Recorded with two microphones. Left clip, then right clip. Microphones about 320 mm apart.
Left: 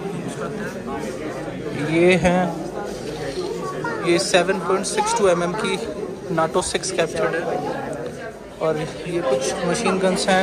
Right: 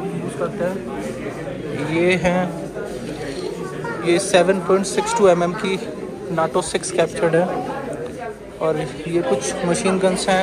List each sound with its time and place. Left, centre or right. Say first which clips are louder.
1.9 s speech: left 2 dB; centre
4.0 s speech: right 3 dB; centre
8.6 s speech: right 1 dB; centre